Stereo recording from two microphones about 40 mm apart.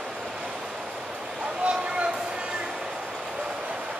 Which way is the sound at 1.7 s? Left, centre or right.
Right.